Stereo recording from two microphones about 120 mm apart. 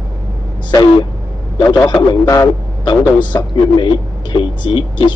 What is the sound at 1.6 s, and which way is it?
A man's voice, 35° left (ahead or behind).